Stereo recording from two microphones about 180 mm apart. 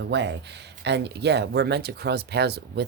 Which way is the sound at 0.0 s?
75° right (ahead or behind).